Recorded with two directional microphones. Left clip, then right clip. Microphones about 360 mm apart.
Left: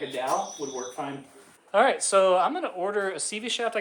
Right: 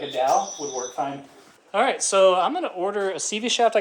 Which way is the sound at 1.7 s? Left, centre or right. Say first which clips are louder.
Even; centre.